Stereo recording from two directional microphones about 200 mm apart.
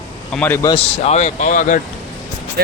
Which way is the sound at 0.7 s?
30° left (ahead or behind).